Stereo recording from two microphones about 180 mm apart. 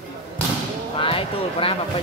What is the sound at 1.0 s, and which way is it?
Speech, 30° left (ahead or behind).